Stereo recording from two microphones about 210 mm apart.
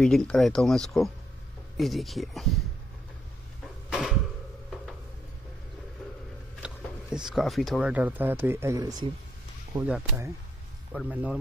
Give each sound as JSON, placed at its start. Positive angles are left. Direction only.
{"t": 0.0, "sound": "speech", "side_deg": 5}
{"t": 3.9, "sound": "a sound", "side_deg": 0}
{"t": 6.6, "sound": "speech", "side_deg": -5}
{"t": 10.9, "sound": "speech", "side_deg": -5}